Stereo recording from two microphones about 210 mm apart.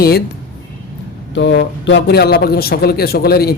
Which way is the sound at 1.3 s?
55° left (ahead or behind).